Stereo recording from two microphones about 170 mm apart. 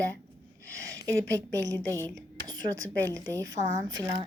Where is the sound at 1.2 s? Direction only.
90° right.